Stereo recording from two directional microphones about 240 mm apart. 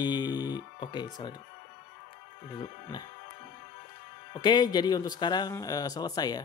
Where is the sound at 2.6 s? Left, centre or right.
Centre.